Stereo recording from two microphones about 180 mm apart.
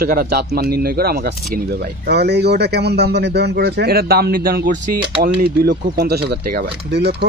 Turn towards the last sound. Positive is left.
turn(degrees=-70)  # may be behind; listen again after turning